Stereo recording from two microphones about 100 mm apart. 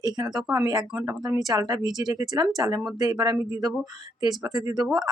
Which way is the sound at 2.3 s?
30° right (ahead or behind).